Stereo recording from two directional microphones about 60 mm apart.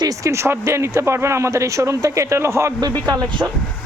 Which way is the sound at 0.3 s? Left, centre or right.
Right.